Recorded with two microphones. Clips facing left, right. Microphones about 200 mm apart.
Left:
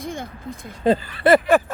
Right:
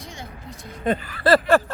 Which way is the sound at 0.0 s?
55° left (ahead or behind).